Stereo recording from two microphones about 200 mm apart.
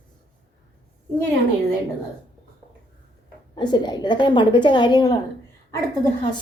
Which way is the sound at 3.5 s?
20° left (ahead or behind).